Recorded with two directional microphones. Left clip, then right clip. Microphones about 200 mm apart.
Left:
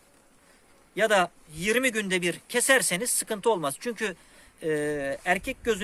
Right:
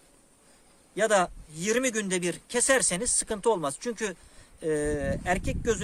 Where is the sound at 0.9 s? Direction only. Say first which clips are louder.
Left 1 dB; 5° right (ahead or behind).